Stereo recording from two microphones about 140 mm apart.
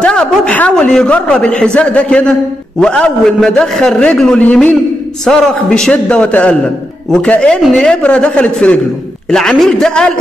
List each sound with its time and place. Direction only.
0.0 s a man's voice: 5° left (ahead or behind)